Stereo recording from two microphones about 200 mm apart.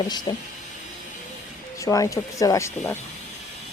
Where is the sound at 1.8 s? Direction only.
15° left (ahead or behind).